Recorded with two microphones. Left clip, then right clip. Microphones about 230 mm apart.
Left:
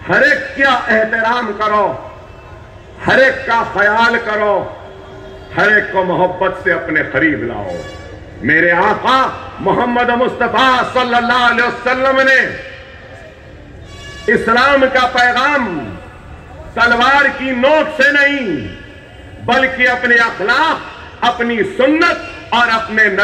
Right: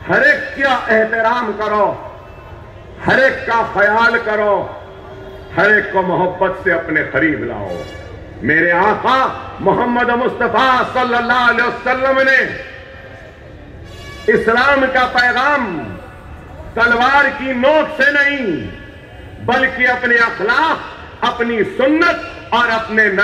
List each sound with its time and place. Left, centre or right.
0.0 s a man's voice: left
3.0 s a man's voice: left
8.5 s a man's voice: left
14.2 s a man's voice: left
16.7 s a man's voice: left
19.4 s a man's voice: left